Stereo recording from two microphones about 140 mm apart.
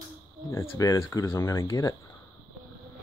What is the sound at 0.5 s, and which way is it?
Speech, 20° left (ahead or behind).